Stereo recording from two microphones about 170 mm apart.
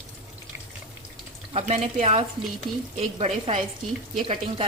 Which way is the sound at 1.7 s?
40° right (ahead or behind).